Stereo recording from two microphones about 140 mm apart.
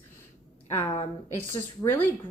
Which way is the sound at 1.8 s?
15° left (ahead or behind).